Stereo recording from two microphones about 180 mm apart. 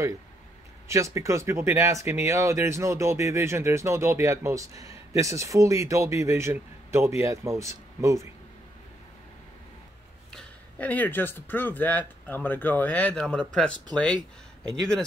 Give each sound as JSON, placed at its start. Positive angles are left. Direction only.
{"t": 0.8, "sound": "speech", "side_deg": -15}
{"t": 10.3, "sound": "speech", "side_deg": 10}
{"t": 14.7, "sound": "speech", "side_deg": 5}